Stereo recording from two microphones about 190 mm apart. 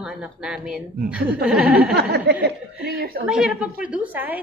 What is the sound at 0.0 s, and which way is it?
A woman's voice, 5° right (ahead or behind).